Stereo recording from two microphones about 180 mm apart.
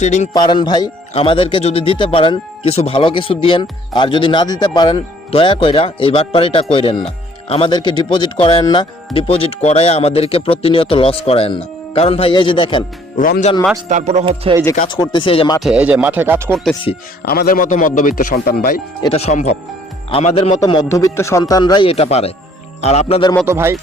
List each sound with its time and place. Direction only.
0.0 s speech: 40° left (ahead or behind)
0.3 s speech: 25° left (ahead or behind)
13.1 s a man's voice: 50° left (ahead or behind)
13.8 s speech: 40° right (ahead or behind)
14.8 s speech: 25° left (ahead or behind)
15.6 s speech: 5° right (ahead or behind)
17.2 s a man's voice: 55° left (ahead or behind)
19.0 s speech: 35° left (ahead or behind)
20.6 s speech: 20° left (ahead or behind)
23.5 s speech: 15° right (ahead or behind)